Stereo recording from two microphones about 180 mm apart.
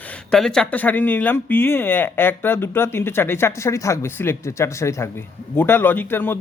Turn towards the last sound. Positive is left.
turn(degrees=10)  # may be behind; listen again after turning